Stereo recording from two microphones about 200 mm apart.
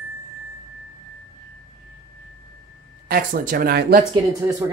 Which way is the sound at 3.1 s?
45° right (ahead or behind).